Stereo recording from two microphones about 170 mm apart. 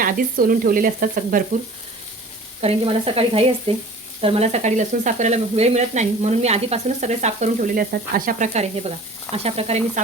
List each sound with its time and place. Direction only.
0.0 s speech: 55° right (ahead or behind)
2.6 s speech: 35° right (ahead or behind)